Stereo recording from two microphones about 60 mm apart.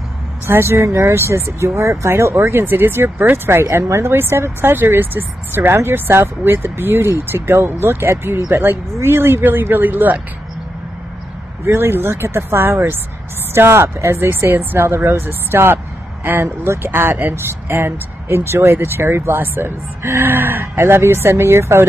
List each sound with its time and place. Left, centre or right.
0.5 s speech: right
11.6 s speech: right